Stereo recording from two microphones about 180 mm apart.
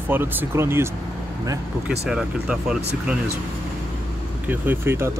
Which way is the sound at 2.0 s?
5° right (ahead or behind).